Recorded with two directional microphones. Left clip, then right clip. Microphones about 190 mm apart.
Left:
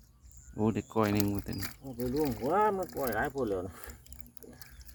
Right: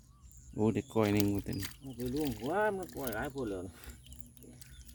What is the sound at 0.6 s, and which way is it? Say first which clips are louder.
Speech: left 1 dB; 30° right (ahead or behind).